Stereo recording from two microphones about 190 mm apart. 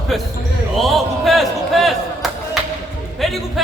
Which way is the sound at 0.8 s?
Centre (ahead or behind).